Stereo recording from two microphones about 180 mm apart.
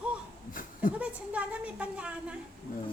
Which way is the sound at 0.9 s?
5° right (ahead or behind).